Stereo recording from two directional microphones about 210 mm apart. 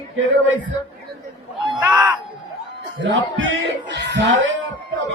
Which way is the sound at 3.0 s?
60° right (ahead or behind).